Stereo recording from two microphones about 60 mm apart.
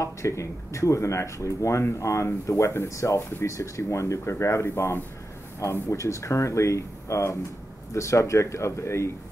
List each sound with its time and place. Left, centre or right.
0.0 s speech: left
5.6 s speech: left